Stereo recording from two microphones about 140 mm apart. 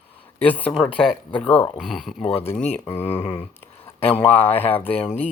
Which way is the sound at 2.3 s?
45° left (ahead or behind).